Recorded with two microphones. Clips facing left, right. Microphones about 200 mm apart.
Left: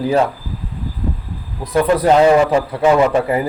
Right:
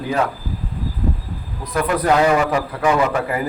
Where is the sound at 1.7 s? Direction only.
30° left (ahead or behind).